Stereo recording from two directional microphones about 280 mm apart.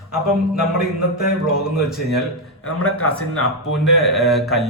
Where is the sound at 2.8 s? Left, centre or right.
Left.